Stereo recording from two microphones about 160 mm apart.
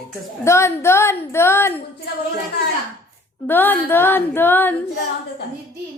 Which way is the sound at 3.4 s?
10° left (ahead or behind).